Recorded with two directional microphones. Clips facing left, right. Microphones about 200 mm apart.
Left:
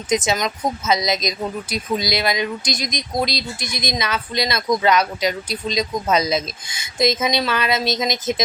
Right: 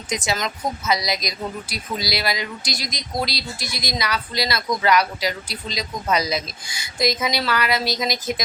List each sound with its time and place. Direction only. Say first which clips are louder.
0.1 s speech: left 5 dB; 20° left (ahead or behind)